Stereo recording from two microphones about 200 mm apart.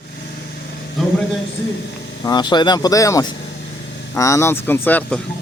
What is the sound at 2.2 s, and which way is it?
Speech, 20° left (ahead or behind).